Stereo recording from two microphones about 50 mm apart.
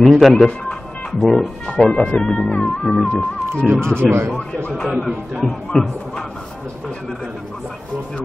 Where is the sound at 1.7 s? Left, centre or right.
Centre.